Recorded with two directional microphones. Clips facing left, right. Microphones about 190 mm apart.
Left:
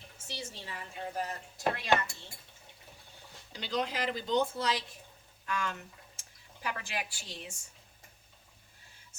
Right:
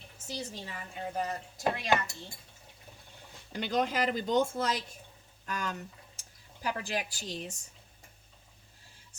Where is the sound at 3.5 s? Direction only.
50° right (ahead or behind).